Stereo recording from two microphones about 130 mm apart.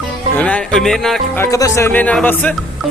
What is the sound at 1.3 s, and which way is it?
Speech, 20° left (ahead or behind).